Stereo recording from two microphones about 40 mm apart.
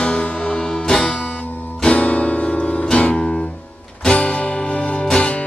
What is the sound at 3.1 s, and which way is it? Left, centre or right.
Music, centre.